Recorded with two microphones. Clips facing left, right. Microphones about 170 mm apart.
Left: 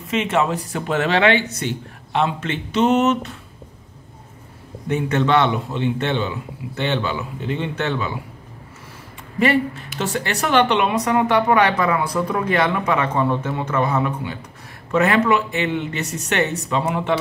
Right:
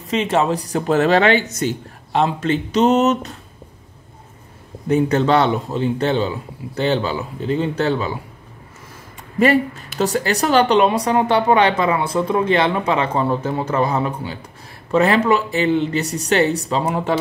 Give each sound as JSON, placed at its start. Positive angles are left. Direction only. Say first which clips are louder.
{"t": 0.1, "sound": "a woman's voice", "louder": "right 2 dB", "side_deg": -35}
{"t": 4.8, "sound": "a woman's voice", "louder": "right 4 dB", "side_deg": -35}
{"t": 9.4, "sound": "a woman's voice", "louder": "right 3 dB", "side_deg": -40}